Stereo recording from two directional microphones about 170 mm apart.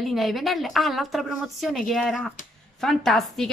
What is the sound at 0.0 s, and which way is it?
Speech, centre (ahead or behind).